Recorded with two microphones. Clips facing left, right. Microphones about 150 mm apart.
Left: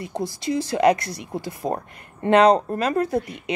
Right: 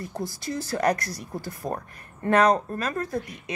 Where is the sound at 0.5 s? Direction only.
15° left (ahead or behind).